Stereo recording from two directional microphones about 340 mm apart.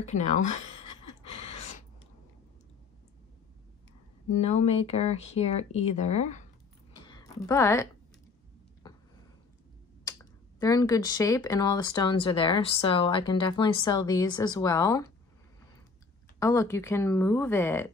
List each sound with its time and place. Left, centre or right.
0.0 s speech: centre
1.3 s gasp: centre
4.4 s speech: centre
7.0 s a sound: centre
10.6 s speech: centre
16.3 s speech: centre